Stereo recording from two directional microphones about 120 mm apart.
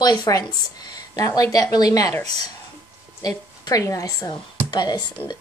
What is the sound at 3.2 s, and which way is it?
A woman's voice, 30° left (ahead or behind).